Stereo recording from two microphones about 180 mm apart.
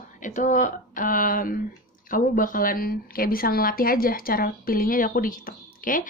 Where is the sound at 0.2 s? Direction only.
45° left (ahead or behind).